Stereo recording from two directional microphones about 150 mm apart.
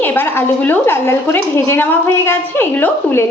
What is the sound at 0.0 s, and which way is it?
Speech, 15° left (ahead or behind).